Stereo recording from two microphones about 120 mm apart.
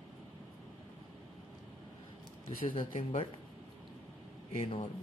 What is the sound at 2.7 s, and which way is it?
Speech, 45° left (ahead or behind).